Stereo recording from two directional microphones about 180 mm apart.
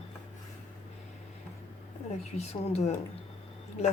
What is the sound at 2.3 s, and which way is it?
Speech, 35° left (ahead or behind).